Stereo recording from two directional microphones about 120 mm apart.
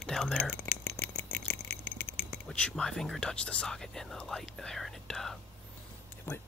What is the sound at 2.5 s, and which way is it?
Speech, 10° left (ahead or behind).